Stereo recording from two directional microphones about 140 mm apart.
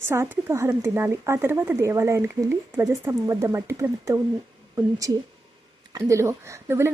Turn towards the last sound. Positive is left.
turn(degrees=-20)  # may be behind; listen again after turning